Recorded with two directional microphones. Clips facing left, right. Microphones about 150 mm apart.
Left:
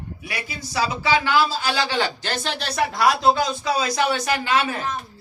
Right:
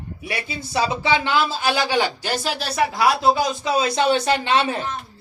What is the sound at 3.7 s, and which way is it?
A woman's voice, 30° right (ahead or behind).